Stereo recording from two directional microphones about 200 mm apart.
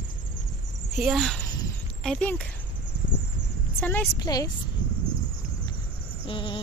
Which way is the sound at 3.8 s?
10° left (ahead or behind).